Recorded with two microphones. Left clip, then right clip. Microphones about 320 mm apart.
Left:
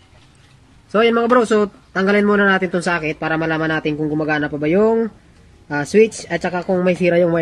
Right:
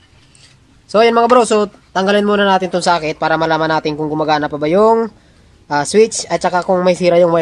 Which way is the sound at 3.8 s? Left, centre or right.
Right.